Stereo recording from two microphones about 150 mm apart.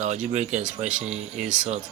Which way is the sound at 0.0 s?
50° right (ahead or behind).